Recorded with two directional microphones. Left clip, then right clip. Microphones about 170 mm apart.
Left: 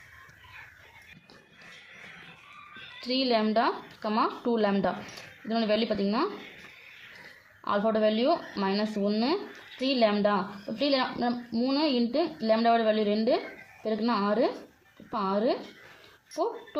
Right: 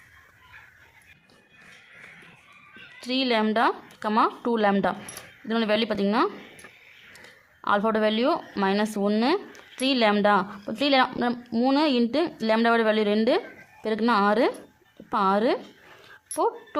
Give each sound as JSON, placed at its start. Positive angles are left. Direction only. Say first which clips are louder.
{"t": 3.0, "sound": "speech", "louder": "right 2 dB", "side_deg": -30}
{"t": 7.6, "sound": "speech", "louder": "right 3 dB", "side_deg": -35}